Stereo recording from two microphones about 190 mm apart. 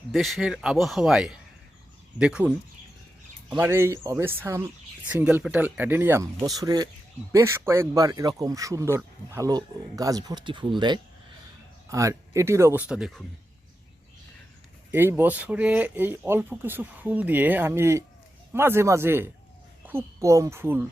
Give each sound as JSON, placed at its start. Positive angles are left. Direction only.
{"t": 0.1, "sound": "speech", "side_deg": 0}
{"t": 3.5, "sound": "speech", "side_deg": -15}
{"t": 14.9, "sound": "speech", "side_deg": -10}